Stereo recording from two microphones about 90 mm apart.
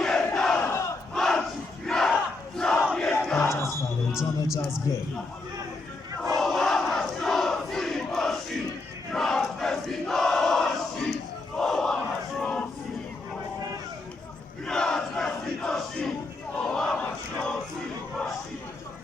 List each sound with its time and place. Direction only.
0.0 s crowd: 5° left (ahead or behind)
3.4 s music: 30° left (ahead or behind)
4.1 s a man's voice: 5° right (ahead or behind)
6.3 s crowd: centre (ahead or behind)
14.7 s crowd: 5° left (ahead or behind)
16.6 s battle cry: 10° left (ahead or behind)